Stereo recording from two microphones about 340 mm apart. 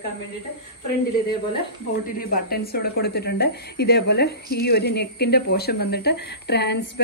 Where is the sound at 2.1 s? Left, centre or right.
Left.